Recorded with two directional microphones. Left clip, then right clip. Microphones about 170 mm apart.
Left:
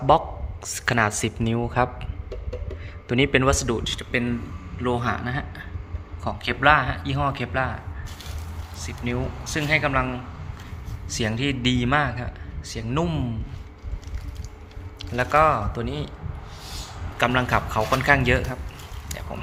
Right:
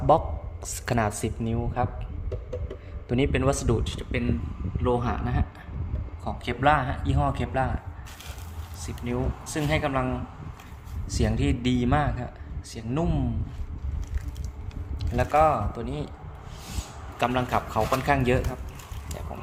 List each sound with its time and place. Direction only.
0.1 s a man's voice: 10° right (ahead or behind)
1.4 s speech: 15° left (ahead or behind)
3.1 s a man's voice: centre (ahead or behind)
8.8 s a man's voice: 15° right (ahead or behind)
15.1 s a man's voice: 5° right (ahead or behind)
17.2 s a man's voice: 10° right (ahead or behind)
19.0 s a sound: 10° right (ahead or behind)